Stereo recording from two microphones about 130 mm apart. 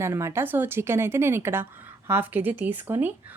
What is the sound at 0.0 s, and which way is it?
Speech, 20° right (ahead or behind).